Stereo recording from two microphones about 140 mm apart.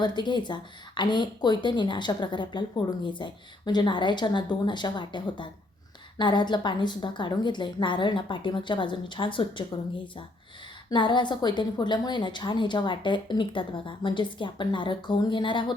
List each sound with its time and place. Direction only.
0.0 s speech: 30° left (ahead or behind)
10.8 s speech: 35° left (ahead or behind)